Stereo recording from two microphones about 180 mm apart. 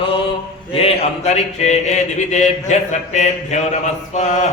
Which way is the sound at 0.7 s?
35° left (ahead or behind).